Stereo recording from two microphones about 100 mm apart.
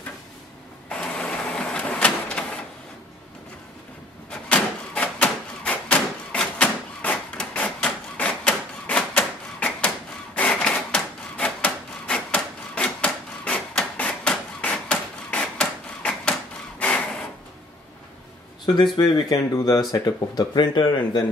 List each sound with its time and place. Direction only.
0.8 s printer: 10° left (ahead or behind)
4.3 s a sound: 15° left (ahead or behind)
18.9 s speech: 45° left (ahead or behind)